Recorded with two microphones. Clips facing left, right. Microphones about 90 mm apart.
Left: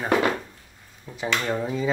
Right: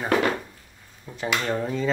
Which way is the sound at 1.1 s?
5° right (ahead or behind).